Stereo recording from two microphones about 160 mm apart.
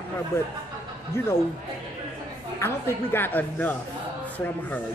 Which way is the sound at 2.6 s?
15° left (ahead or behind).